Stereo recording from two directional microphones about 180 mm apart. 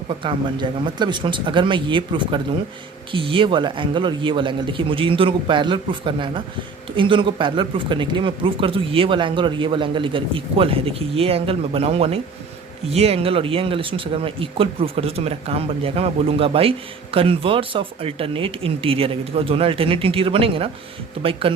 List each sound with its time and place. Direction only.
0.1 s speech: 30° right (ahead or behind)